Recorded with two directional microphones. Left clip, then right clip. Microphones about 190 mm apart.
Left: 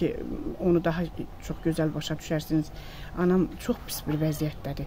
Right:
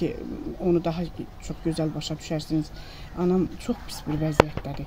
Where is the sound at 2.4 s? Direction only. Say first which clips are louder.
Right 1 dB; 25° left (ahead or behind).